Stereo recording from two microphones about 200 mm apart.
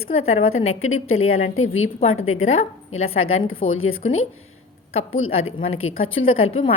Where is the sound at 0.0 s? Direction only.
90° left.